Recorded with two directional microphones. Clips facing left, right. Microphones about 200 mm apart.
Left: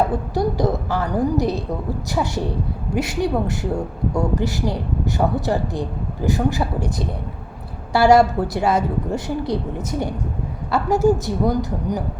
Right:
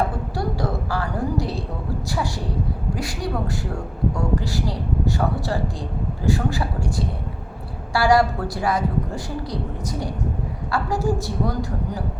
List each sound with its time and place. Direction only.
0.3 s a woman's voice: 20° left (ahead or behind)
2.9 s a woman's voice: 25° left (ahead or behind)
7.9 s a woman's voice: 25° left (ahead or behind)
10.7 s a woman's voice: 20° left (ahead or behind)